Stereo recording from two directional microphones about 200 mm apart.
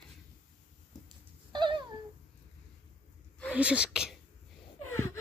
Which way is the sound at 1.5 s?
25° right (ahead or behind).